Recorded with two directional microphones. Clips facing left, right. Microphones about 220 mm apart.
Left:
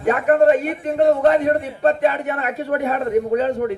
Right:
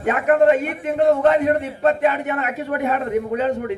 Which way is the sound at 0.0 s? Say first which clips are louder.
Left 1 dB; 40° left (ahead or behind).